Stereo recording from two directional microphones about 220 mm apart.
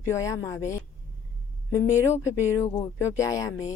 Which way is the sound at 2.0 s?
10° left (ahead or behind).